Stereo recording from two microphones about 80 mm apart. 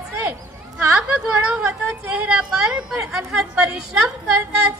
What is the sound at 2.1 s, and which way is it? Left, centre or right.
A woman's voice, centre.